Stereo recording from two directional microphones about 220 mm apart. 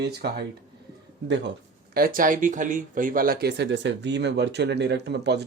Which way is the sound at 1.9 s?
40° right (ahead or behind).